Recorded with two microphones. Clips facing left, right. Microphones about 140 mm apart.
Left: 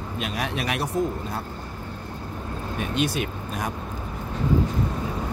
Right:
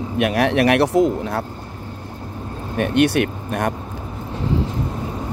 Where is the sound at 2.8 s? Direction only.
65° right (ahead or behind).